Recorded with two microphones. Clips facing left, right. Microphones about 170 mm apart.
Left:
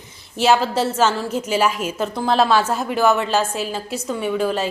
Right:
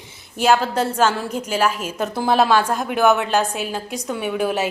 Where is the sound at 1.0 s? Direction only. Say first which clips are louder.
Left 1 dB; 10° right (ahead or behind).